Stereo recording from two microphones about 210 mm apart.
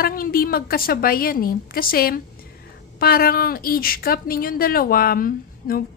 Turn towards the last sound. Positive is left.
turn(degrees=45)  # may be behind; listen again after turning